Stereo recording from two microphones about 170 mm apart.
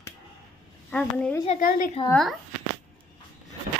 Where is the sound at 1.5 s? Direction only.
55° left (ahead or behind).